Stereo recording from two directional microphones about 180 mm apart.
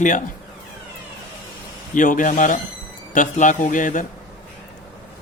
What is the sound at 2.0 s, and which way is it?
Speech, 45° left (ahead or behind).